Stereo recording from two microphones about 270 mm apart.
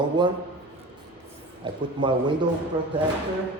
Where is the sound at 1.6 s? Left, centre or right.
Centre.